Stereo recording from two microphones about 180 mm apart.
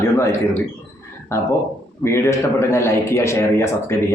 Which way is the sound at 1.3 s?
15° left (ahead or behind).